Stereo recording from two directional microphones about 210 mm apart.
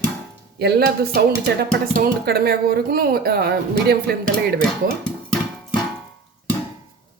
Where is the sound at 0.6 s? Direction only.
50° right (ahead or behind).